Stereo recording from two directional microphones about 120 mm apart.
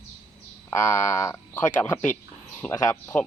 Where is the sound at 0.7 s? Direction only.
20° left (ahead or behind).